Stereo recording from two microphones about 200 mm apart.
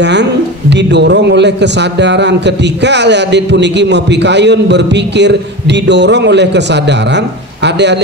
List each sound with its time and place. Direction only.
0.0 s speech: 60° right (ahead or behind)